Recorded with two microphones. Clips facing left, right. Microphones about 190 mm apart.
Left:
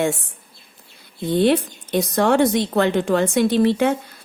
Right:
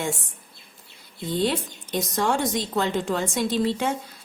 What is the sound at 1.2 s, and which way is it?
A woman's voice, 60° left (ahead or behind).